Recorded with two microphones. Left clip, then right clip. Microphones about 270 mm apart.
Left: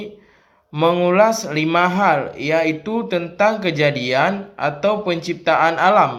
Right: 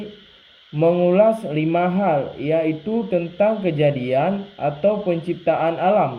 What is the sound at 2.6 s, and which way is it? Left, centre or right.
Speech, left.